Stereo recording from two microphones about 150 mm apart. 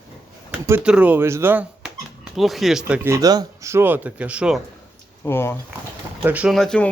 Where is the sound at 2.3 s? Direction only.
Centre (ahead or behind).